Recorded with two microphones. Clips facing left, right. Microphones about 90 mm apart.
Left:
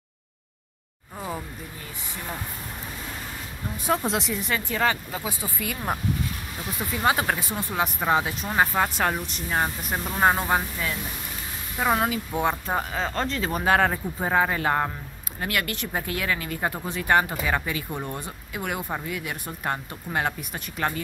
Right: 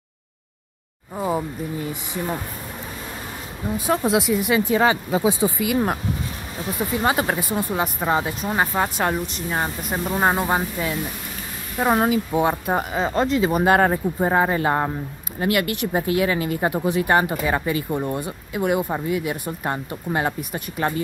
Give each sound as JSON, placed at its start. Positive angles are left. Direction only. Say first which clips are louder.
{"t": 1.1, "sound": "speech", "louder": "right 9 dB", "side_deg": -25}
{"t": 3.7, "sound": "speech", "louder": "right 5 dB", "side_deg": -5}
{"t": 6.8, "sound": "speech", "louder": "right 3 dB", "side_deg": -15}
{"t": 12.1, "sound": "speech", "louder": "right 6 dB", "side_deg": -5}